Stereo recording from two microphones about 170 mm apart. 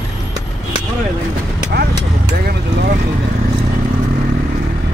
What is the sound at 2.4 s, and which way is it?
Vehicle, 65° right (ahead or behind).